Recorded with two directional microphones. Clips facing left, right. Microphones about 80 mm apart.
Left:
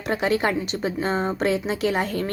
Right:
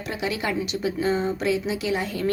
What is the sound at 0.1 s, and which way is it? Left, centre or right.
Speech, left.